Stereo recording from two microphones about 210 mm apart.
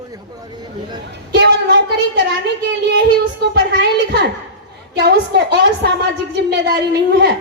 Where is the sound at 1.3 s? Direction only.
55° right (ahead or behind).